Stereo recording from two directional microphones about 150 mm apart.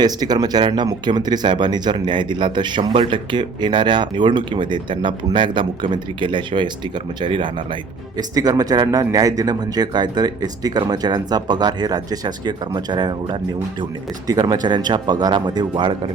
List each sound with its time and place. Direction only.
0.0 s a man's voice: 25° right (ahead or behind)